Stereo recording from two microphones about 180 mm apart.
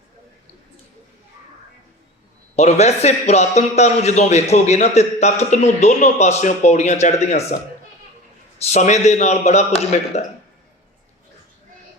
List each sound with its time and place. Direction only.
2.6 s a man's voice: 40° left (ahead or behind)
8.6 s a man's voice: 40° left (ahead or behind)